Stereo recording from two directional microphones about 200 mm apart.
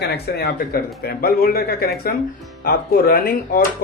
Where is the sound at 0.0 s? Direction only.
50° left (ahead or behind).